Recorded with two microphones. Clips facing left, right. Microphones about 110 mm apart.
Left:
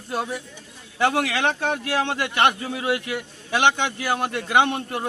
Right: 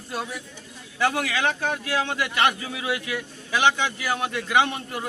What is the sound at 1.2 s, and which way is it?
Speech, 65° left (ahead or behind).